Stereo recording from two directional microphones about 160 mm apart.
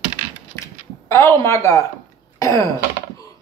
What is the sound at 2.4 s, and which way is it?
Throat clearing, 20° left (ahead or behind).